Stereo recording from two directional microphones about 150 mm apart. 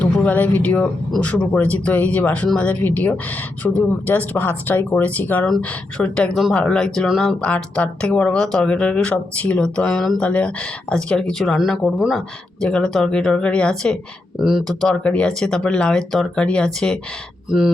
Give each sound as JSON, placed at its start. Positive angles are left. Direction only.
{"t": 0.0, "sound": "speech", "side_deg": 10}